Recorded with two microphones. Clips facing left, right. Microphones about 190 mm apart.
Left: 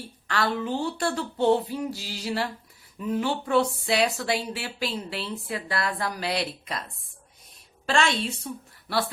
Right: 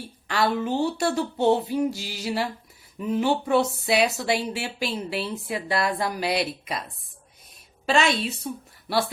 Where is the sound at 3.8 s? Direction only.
15° right (ahead or behind).